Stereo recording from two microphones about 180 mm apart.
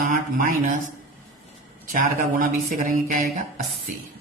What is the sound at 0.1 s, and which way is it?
Speech, 50° right (ahead or behind).